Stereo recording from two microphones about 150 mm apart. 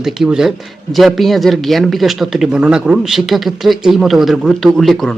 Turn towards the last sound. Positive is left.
turn(degrees=0)  # may be behind; listen again after turning